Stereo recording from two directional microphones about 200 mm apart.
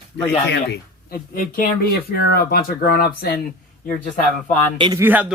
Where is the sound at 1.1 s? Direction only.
45° left (ahead or behind).